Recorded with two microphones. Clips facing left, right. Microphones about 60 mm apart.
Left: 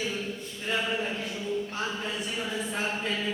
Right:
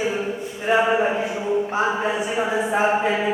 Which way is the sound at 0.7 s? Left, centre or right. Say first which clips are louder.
Right 12 dB; right.